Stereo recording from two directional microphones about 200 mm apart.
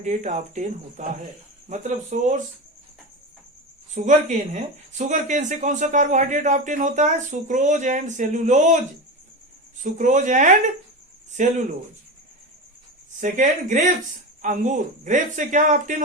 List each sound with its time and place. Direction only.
0.0 s speech: 35° right (ahead or behind)
3.9 s speech: 40° right (ahead or behind)
9.8 s speech: 40° right (ahead or behind)
13.1 s speech: 40° right (ahead or behind)